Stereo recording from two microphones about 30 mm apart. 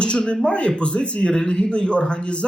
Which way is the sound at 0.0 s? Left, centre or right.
Left.